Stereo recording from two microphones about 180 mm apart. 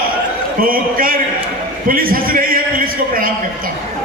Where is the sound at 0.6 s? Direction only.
55° right (ahead or behind).